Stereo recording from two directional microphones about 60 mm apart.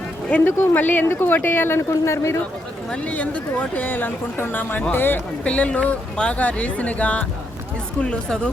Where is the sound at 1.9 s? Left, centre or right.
Left.